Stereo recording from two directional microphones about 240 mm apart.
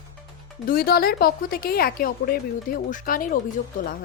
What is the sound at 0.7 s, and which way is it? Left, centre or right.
Speech, left.